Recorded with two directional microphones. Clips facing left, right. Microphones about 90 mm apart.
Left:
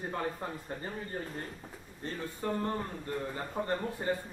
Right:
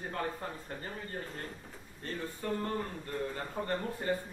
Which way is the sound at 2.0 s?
15° left (ahead or behind).